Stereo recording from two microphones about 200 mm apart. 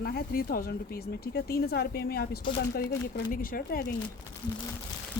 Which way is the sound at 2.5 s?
25° left (ahead or behind).